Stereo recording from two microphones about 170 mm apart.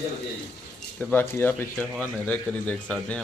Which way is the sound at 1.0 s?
10° left (ahead or behind).